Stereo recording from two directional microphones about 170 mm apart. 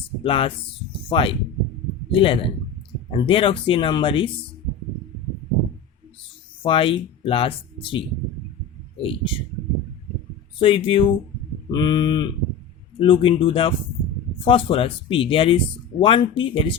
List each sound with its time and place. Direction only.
0.2 s speech: 30° left (ahead or behind)
6.6 s speech: 30° left (ahead or behind)
10.6 s speech: 30° left (ahead or behind)